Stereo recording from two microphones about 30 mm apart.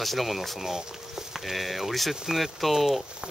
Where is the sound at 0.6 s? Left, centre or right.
Centre.